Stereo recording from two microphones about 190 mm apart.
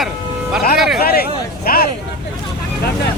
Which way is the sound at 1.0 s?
55° left (ahead or behind).